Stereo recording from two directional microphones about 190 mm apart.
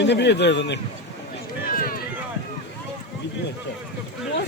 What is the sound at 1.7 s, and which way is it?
Run, 50° left (ahead or behind).